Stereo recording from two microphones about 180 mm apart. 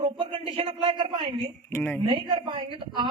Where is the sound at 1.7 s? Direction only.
10° left (ahead or behind).